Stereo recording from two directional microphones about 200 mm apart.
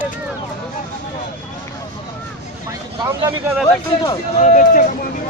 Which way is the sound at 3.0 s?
15° right (ahead or behind).